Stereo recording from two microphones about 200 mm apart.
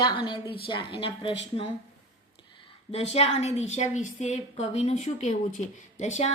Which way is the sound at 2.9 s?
30° left (ahead or behind).